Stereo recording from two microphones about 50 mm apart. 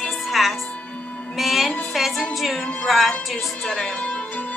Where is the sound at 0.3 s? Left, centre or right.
Centre.